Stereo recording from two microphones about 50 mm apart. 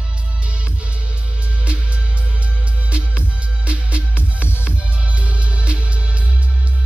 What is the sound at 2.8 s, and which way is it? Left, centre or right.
Music, right.